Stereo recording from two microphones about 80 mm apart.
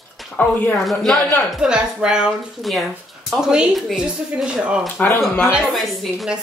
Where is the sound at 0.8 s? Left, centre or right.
Centre.